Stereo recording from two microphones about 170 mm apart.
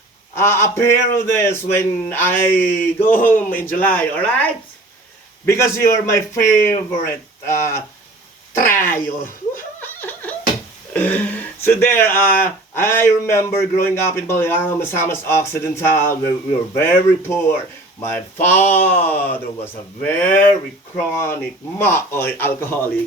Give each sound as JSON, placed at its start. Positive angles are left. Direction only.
{"t": 0.3, "sound": "speech", "side_deg": 15}
{"t": 9.8, "sound": "a sound", "side_deg": 10}
{"t": 10.9, "sound": "speech", "side_deg": 10}
{"t": 18.4, "sound": "speech", "side_deg": 10}
{"t": 20.2, "sound": "speech", "side_deg": 45}
{"t": 20.9, "sound": "speech", "side_deg": 15}